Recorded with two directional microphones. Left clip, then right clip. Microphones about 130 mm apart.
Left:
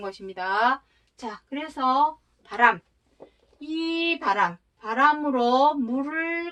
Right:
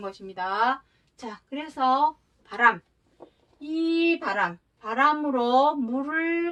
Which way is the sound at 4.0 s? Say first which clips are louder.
Left 4 dB; 20° left (ahead or behind).